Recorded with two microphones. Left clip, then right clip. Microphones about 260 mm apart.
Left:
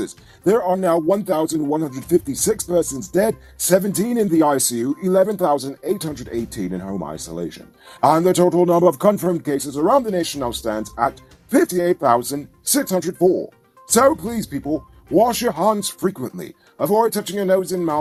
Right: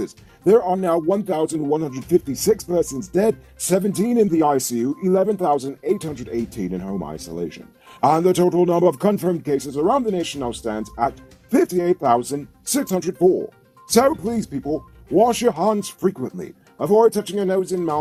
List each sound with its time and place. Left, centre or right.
0.0 s speech: left
2.0 s speech: centre
2.6 s speech: left